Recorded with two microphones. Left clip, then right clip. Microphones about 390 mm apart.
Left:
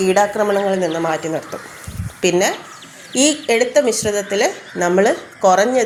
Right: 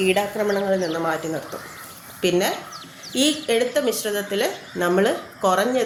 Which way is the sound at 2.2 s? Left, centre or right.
Right.